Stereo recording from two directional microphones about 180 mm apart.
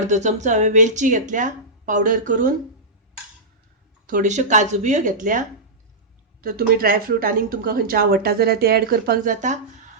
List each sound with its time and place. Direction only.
0.1 s speech: 40° right (ahead or behind)
4.0 s speech: 45° right (ahead or behind)
6.4 s speech: 55° right (ahead or behind)